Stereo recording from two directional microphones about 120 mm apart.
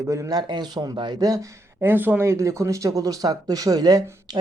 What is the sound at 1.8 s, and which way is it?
Speech, 15° right (ahead or behind).